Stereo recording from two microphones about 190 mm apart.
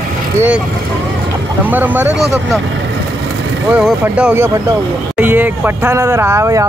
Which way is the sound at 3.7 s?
5° right (ahead or behind).